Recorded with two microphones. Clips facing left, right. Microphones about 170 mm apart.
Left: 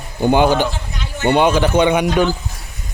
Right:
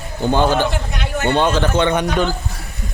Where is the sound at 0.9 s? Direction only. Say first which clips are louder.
Right 4 dB; 65° right (ahead or behind).